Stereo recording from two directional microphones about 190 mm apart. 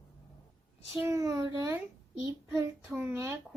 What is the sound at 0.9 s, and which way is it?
A child's voice, 15° right (ahead or behind).